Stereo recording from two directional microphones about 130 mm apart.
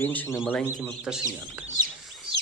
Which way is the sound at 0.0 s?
15° left (ahead or behind).